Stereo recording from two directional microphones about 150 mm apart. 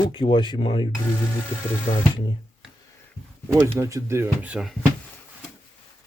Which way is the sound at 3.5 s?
15° right (ahead or behind).